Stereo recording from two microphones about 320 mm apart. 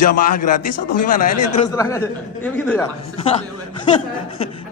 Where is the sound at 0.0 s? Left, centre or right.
Left.